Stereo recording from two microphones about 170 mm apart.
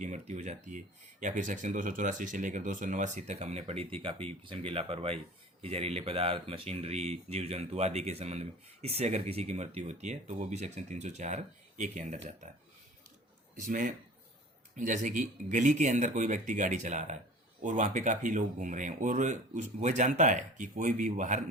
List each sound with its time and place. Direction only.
0.0 s speech: 45° right (ahead or behind)
13.6 s speech: 50° right (ahead or behind)